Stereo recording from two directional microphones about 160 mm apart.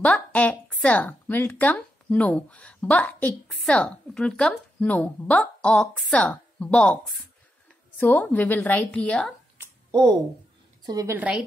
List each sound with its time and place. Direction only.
0.0 s speech: 10° left (ahead or behind)
9.8 s a sound: 25° right (ahead or behind)
10.8 s a woman's voice: 20° right (ahead or behind)
11.1 s speech: 5° right (ahead or behind)